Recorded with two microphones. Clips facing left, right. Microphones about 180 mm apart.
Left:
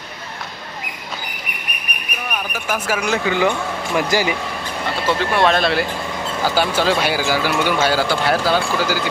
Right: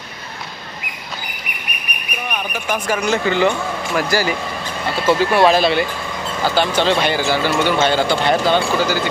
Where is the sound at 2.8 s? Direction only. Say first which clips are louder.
Right 2 dB; 5° left (ahead or behind).